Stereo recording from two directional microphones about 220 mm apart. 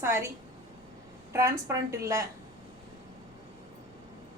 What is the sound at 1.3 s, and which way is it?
Speech, 15° right (ahead or behind).